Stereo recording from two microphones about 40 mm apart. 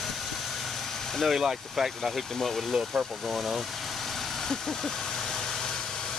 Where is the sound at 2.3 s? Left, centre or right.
Centre.